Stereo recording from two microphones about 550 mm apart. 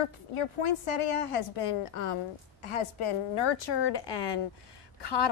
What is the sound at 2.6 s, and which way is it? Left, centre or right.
A woman's voice, left.